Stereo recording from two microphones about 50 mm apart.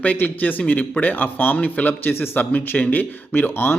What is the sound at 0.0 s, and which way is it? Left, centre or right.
A man's voice, left.